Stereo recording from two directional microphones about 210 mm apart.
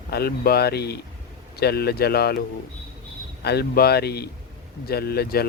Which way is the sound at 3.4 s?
50° left (ahead or behind).